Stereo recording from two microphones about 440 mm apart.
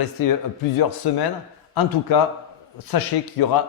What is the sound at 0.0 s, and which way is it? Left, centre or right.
A man's voice, left.